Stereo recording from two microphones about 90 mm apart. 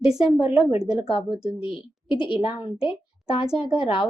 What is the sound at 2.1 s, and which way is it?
Speech, 10° right (ahead or behind).